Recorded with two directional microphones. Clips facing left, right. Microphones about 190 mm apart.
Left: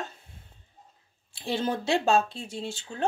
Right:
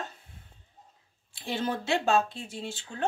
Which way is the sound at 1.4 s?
30° left (ahead or behind).